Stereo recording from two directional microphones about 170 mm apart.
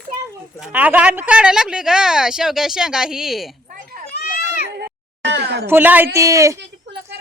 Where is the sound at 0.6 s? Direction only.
10° right (ahead or behind).